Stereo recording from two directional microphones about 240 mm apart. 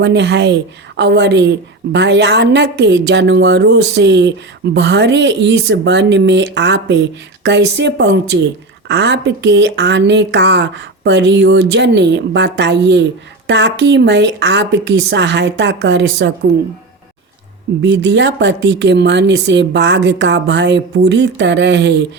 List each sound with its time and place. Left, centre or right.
0.0 s a woman's voice: right
17.8 s a woman's voice: right